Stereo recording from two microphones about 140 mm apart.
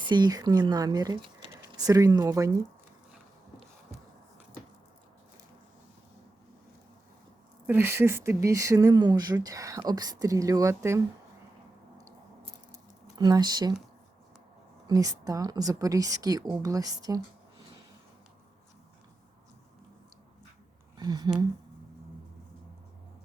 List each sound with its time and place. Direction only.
0.1 s speech: 30° right (ahead or behind)
7.7 s speech: 15° right (ahead or behind)
13.1 s speech: 30° right (ahead or behind)
14.8 s speech: 25° right (ahead or behind)
20.9 s speech: 30° right (ahead or behind)